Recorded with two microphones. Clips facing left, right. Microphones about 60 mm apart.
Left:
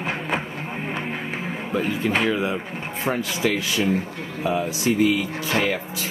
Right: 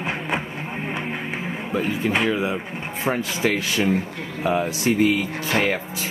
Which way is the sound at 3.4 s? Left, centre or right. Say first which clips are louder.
Right 1 dB; right.